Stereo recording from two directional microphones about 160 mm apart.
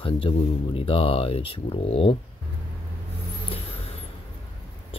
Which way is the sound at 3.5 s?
40° left (ahead or behind).